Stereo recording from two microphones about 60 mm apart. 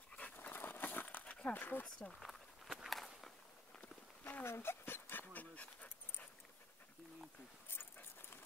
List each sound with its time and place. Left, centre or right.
0.1 s dog: left
0.5 s dog: left
1.2 s a sound: left
1.5 s speech: left
1.9 s speech: centre
2.1 s walk: centre
4.2 s a sound: left
4.5 s dog: left
5.3 s dog: left
7.7 s dog: left